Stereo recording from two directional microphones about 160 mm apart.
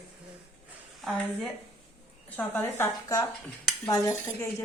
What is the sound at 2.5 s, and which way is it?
Speech, 15° left (ahead or behind).